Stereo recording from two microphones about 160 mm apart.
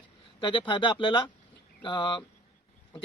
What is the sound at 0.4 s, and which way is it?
A man's voice, 30° left (ahead or behind).